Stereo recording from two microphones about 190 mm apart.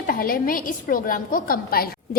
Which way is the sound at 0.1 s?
50° left (ahead or behind).